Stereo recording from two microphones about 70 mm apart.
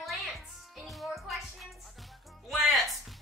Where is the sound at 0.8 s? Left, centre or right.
Centre.